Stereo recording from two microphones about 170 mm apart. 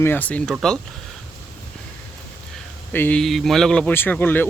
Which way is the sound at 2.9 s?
10° left (ahead or behind).